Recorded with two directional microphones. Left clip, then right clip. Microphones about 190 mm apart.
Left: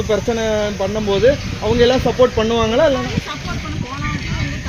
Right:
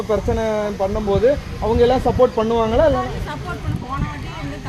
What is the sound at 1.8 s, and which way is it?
Speech, 40° left (ahead or behind).